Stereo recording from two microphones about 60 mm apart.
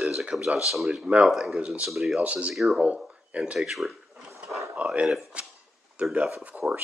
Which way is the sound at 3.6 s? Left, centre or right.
Centre.